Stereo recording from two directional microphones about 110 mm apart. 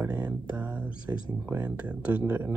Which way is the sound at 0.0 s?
15° right (ahead or behind).